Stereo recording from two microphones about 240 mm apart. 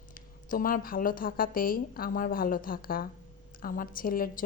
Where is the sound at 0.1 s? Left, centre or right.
Left.